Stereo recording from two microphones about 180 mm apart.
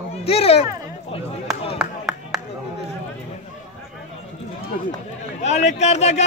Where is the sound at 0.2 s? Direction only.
35° left (ahead or behind).